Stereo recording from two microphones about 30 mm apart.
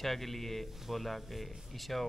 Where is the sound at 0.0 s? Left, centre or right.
Centre.